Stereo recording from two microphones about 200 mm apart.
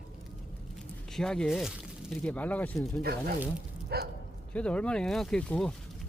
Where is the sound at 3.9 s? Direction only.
55° right (ahead or behind).